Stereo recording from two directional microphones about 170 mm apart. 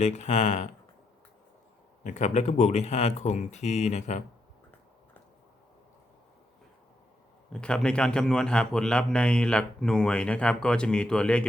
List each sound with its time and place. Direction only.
0.0 s speech: 45° left (ahead or behind)
2.0 s speech: 45° left (ahead or behind)
7.5 s a man's voice: 5° left (ahead or behind)